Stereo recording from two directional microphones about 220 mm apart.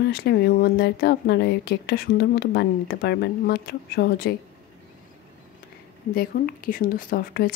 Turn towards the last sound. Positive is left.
turn(degrees=45)  # may be behind; listen again after turning